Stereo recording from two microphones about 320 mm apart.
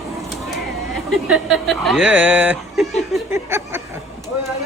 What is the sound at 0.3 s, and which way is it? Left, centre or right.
Speech, centre.